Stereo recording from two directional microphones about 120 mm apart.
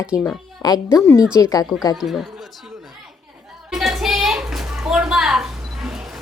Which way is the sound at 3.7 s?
5° right (ahead or behind).